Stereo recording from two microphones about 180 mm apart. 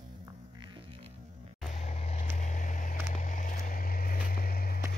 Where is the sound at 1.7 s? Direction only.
35° left (ahead or behind); by 4.8 s 55° left (ahead or behind).